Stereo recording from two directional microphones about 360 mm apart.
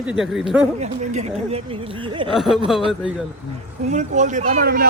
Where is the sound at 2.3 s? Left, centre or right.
Centre.